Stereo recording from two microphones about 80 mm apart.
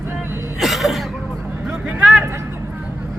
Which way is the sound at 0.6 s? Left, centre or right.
Centre.